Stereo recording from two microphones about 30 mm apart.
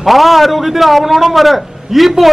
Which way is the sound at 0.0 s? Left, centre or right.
Centre.